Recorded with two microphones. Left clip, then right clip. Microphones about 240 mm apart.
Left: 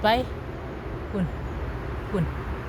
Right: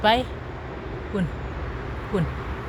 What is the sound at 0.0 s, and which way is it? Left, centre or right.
Speech, centre.